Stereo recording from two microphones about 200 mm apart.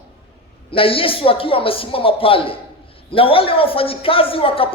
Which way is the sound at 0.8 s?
25° left (ahead or behind).